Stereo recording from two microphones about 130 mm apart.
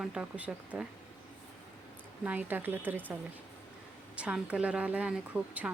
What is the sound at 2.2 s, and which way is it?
Speech, 15° right (ahead or behind).